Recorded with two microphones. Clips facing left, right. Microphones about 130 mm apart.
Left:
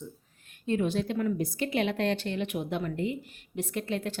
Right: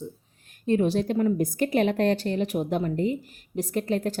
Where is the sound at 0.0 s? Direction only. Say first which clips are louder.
Right 6 dB; 35° right (ahead or behind).